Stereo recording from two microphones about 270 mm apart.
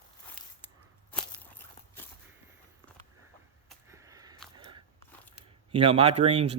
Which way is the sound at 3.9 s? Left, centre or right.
Centre.